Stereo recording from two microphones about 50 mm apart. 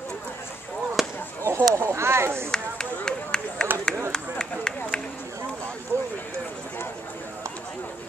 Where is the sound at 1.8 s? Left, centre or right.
Right.